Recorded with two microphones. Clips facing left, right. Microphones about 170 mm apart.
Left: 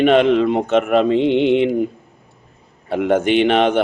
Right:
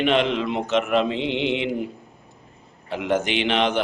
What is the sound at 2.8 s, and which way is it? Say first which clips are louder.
Speech: left 7 dB; 55° left (ahead or behind).